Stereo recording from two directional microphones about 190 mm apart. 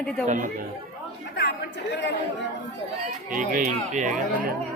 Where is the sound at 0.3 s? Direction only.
40° right (ahead or behind).